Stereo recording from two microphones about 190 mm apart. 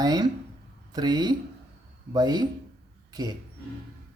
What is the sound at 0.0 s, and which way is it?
Speech, 20° right (ahead or behind).